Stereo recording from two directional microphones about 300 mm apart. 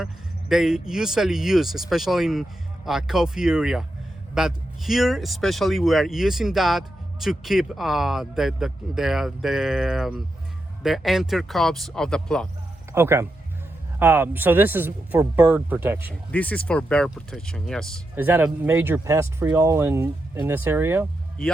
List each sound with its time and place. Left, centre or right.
0.0 s speech: centre
12.9 s speech: centre
16.3 s speech: centre